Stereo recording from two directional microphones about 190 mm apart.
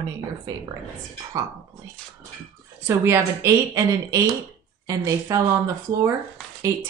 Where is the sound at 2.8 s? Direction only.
15° right (ahead or behind).